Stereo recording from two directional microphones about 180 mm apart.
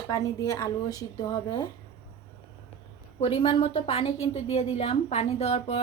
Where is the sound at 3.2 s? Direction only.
30° left (ahead or behind).